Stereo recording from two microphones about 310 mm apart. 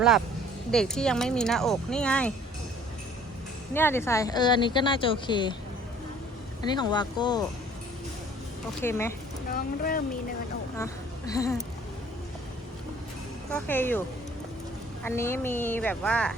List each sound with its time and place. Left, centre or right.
0.7 s speech: centre
3.8 s speech: centre
6.6 s speech: centre
8.8 s speech: centre
9.5 s speech: left
10.8 s a woman's voice: centre
13.5 s speech: centre
15.0 s speech: centre